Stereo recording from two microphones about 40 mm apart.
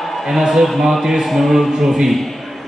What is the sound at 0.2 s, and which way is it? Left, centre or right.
Speech, centre.